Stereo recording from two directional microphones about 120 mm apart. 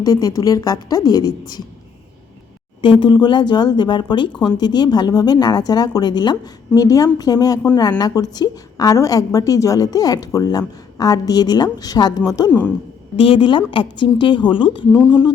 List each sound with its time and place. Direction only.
0.0 s a woman's voice: 30° left (ahead or behind)
3.0 s a woman's voice: 40° left (ahead or behind)
4.3 s speech: 5° left (ahead or behind)
4.5 s a woman's voice: 35° left (ahead or behind)
12.5 s speech: 15° left (ahead or behind)
13.1 s a woman's voice: 45° left (ahead or behind)